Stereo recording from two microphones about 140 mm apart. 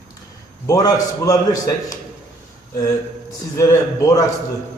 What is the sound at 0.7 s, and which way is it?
A man's voice, 25° left (ahead or behind).